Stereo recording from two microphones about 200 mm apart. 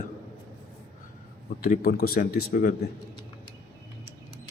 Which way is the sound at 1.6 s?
45° left (ahead or behind).